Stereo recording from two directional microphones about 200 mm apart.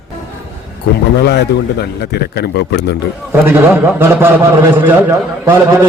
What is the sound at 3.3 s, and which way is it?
A man's voice, 10° right (ahead or behind).